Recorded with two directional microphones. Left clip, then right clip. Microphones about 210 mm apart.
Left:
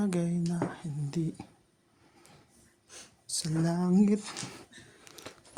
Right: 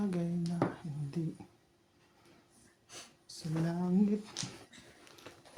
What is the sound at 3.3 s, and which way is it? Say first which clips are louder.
Speech: left 7 dB; 45° left (ahead or behind).